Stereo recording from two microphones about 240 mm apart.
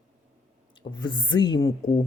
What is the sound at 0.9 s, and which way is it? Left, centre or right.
Speech, centre.